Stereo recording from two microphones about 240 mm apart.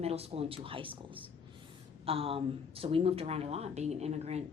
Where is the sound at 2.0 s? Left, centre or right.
Right.